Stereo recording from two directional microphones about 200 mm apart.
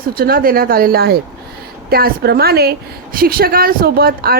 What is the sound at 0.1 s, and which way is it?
A woman's voice, 45° right (ahead or behind).